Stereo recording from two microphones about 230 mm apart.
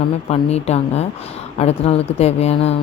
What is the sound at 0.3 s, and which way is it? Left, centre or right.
Speech, left.